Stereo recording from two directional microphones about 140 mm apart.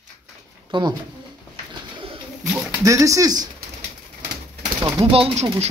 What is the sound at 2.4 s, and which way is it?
Pigeon, 10° right (ahead or behind).